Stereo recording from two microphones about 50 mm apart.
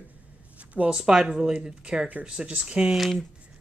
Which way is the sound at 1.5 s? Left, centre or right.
Right.